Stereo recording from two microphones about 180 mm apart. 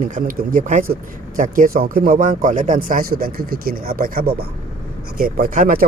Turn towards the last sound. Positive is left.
turn(degrees=-50)  # may be behind; listen again after turning